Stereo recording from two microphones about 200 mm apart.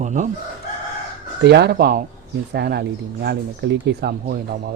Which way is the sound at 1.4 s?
55° right (ahead or behind).